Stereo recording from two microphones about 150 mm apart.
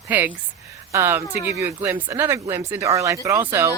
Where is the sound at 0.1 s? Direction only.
10° right (ahead or behind).